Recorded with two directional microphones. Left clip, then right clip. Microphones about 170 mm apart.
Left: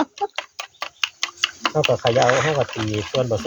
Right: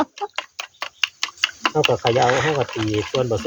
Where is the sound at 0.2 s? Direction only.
15° right (ahead or behind).